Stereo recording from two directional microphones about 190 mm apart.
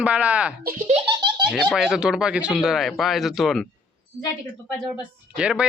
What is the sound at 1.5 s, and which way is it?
A man's voice, centre (ahead or behind).